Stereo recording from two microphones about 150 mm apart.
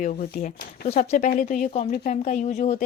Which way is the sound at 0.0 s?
45° left (ahead or behind).